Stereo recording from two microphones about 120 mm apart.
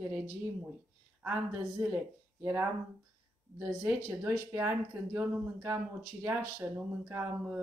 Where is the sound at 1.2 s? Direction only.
15° right (ahead or behind).